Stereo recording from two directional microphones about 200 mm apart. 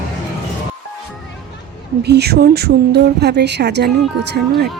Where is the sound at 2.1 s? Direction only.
55° right (ahead or behind).